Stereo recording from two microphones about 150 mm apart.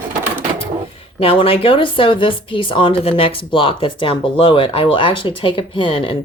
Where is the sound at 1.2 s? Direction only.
40° left (ahead or behind).